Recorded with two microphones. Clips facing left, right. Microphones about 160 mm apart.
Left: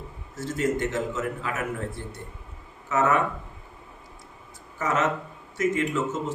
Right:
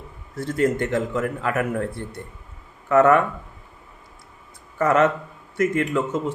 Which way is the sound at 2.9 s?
60° right (ahead or behind).